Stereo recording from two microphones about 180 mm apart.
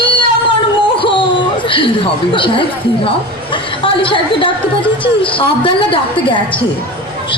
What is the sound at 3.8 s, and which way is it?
A woman's voice, 30° left (ahead or behind).